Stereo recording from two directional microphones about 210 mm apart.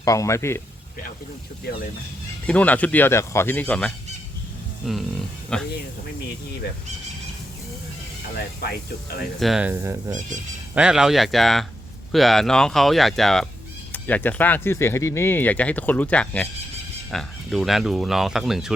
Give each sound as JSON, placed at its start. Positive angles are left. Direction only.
{"t": 0.0, "sound": "speech", "side_deg": 15}
{"t": 2.5, "sound": "speech", "side_deg": 5}
{"t": 5.5, "sound": "speech", "side_deg": 5}
{"t": 8.6, "sound": "speech", "side_deg": 45}
{"t": 9.4, "sound": "speech", "side_deg": -5}
{"t": 10.1, "sound": "speech", "side_deg": -35}
{"t": 10.8, "sound": "speech", "side_deg": -5}